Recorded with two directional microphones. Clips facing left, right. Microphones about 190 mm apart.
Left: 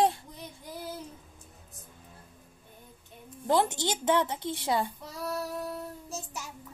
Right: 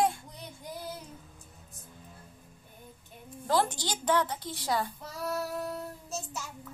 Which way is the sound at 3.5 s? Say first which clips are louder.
Left 2 dB; 20° left (ahead or behind).